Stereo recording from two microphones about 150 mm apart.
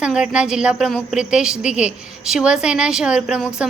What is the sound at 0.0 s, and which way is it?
A woman's voice, 5° right (ahead or behind).